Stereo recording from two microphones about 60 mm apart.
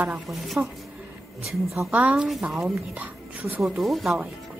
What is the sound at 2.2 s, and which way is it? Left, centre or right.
Speech, centre.